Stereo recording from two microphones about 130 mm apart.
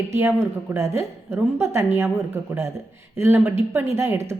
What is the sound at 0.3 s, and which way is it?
A woman's voice, 20° right (ahead or behind).